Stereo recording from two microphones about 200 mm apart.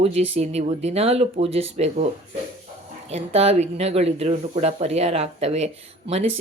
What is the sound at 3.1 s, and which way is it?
Speech, 30° right (ahead or behind).